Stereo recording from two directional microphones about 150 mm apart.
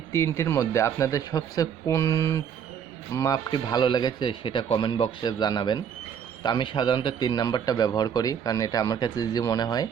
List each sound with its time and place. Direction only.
0.1 s a man's voice: 15° left (ahead or behind)